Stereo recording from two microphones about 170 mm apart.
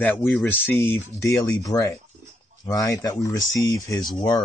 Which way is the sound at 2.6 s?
20° left (ahead or behind).